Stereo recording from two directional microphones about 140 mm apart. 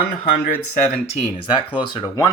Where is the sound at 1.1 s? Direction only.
45° left (ahead or behind).